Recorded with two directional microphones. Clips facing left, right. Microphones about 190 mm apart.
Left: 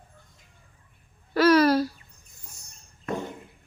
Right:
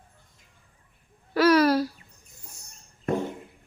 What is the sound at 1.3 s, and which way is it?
Speech, 5° right (ahead or behind).